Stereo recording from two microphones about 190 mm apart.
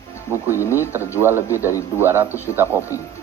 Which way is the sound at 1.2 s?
10° right (ahead or behind).